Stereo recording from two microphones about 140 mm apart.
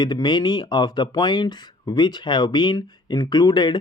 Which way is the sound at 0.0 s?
30° left (ahead or behind).